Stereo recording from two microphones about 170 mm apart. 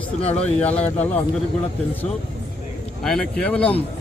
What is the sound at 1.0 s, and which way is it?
Speech, 10° left (ahead or behind).